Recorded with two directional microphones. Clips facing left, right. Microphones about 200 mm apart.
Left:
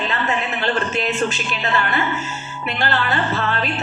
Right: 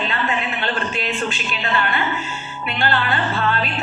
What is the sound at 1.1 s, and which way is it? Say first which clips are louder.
Music: left 3 dB; 45° left (ahead or behind).